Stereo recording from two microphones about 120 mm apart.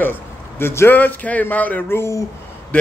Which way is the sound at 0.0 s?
20° left (ahead or behind).